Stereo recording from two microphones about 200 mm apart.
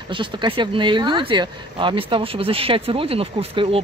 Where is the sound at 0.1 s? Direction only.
25° right (ahead or behind).